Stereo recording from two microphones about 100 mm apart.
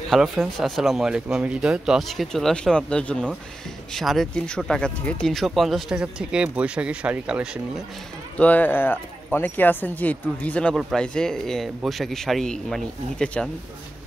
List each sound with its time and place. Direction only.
0.1 s speech: centre (ahead or behind)
8.4 s speech: 15° left (ahead or behind)